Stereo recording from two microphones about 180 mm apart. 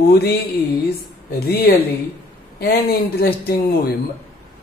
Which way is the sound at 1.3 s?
60° left (ahead or behind).